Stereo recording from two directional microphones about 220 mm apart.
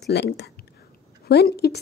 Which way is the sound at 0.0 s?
50° left (ahead or behind).